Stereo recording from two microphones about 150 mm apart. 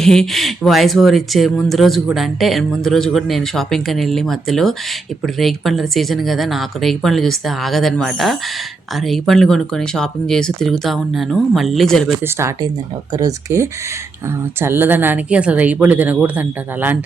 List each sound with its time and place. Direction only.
0.0 s speech: 5° left (ahead or behind)
12.2 s speech: 20° right (ahead or behind)